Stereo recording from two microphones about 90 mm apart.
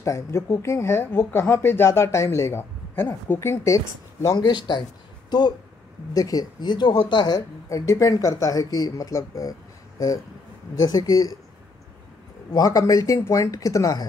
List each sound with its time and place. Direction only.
0.0 s speech: 35° left (ahead or behind)
4.4 s speech: 55° left (ahead or behind)
6.1 s speech: 45° left (ahead or behind)
12.5 s speech: 40° left (ahead or behind)